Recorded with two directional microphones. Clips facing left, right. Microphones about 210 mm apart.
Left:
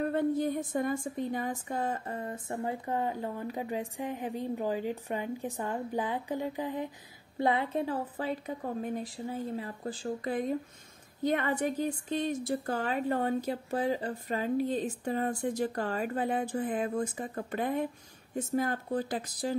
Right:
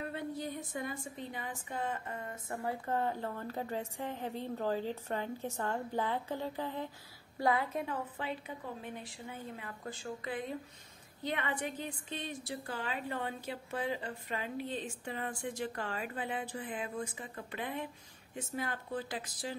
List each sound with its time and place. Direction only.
0.0 s a woman's voice: 50° left (ahead or behind)